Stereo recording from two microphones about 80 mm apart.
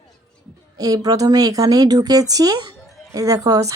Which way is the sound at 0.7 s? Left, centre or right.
Right.